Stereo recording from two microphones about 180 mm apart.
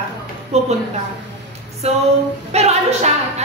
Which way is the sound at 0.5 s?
35° right (ahead or behind).